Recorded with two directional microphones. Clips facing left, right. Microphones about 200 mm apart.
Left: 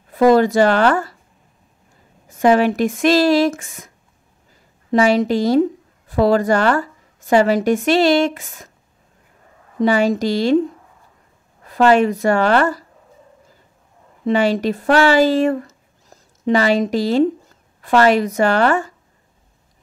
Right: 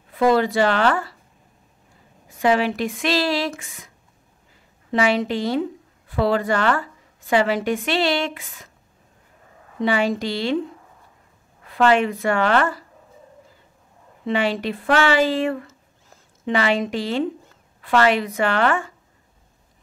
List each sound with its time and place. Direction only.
0.1 s speech: 40° left (ahead or behind)
2.2 s speech: 45° left (ahead or behind)
4.9 s a woman's voice: 40° left (ahead or behind)
9.8 s a woman's voice: 40° left (ahead or behind)
11.6 s a woman's voice: 40° left (ahead or behind)
14.2 s speech: 40° left (ahead or behind)